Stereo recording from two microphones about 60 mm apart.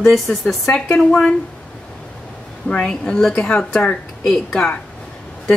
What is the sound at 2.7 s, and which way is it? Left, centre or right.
A woman's voice, centre.